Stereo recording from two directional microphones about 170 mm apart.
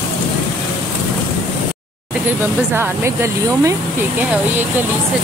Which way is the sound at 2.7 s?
15° right (ahead or behind).